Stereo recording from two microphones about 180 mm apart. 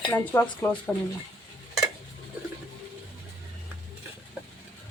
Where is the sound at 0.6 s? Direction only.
10° left (ahead or behind).